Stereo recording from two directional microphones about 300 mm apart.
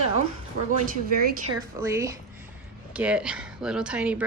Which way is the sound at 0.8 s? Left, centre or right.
Right.